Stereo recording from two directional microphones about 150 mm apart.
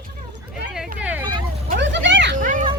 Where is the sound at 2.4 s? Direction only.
60° right (ahead or behind).